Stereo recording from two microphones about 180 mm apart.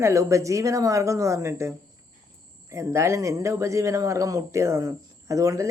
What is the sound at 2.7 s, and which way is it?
Speech, 15° right (ahead or behind).